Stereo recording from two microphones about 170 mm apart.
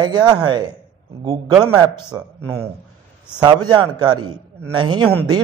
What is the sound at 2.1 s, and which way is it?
Speech, 20° right (ahead or behind).